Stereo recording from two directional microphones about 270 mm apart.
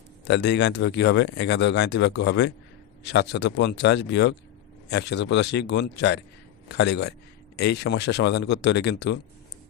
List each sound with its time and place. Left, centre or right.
0.3 s speech: left